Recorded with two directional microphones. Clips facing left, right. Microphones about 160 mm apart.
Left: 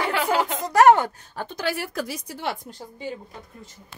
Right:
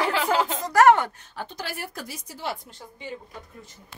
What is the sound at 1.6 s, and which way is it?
Speech, 85° left.